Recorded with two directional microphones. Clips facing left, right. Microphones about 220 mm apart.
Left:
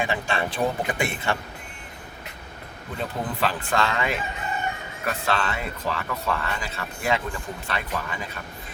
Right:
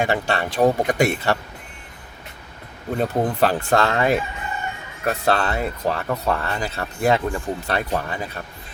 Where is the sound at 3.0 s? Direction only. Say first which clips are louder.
Right 7 dB; 45° right (ahead or behind).